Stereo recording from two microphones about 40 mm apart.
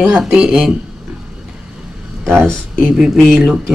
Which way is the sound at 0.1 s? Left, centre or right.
Centre.